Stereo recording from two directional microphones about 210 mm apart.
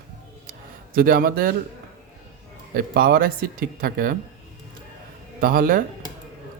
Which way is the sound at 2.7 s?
45° right (ahead or behind).